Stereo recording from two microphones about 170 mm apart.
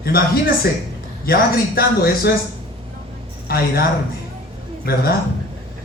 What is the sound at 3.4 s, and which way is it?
Speech, 60° left (ahead or behind).